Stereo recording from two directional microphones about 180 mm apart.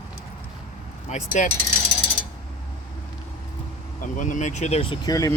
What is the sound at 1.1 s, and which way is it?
Speech, 45° left (ahead or behind).